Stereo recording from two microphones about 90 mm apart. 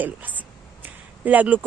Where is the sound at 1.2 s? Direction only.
15° right (ahead or behind).